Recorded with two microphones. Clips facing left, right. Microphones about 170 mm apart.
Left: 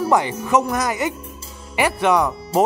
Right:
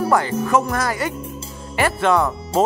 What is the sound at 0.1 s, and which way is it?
Speech, 20° left (ahead or behind).